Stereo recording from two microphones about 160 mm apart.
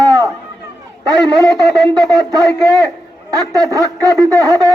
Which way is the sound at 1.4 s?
25° right (ahead or behind).